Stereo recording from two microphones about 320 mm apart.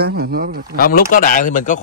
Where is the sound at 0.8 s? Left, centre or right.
Left.